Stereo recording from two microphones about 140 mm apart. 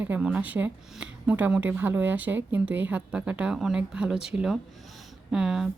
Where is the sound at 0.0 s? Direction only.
10° right (ahead or behind).